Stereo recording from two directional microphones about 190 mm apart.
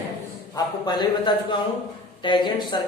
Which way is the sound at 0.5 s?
20° left (ahead or behind).